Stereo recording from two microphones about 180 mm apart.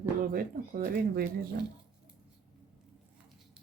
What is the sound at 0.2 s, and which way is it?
Speech, 50° right (ahead or behind).